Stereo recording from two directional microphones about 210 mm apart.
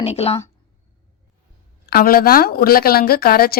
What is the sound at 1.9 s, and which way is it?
A woman's voice, 45° left (ahead or behind).